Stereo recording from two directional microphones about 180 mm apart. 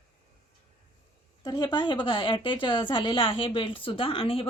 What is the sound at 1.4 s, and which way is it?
A woman's voice, 25° left (ahead or behind).